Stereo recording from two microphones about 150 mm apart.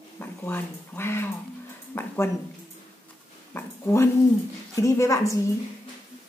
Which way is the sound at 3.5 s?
15° left (ahead or behind).